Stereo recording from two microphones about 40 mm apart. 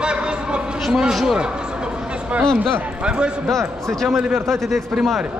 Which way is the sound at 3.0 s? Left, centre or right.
Right.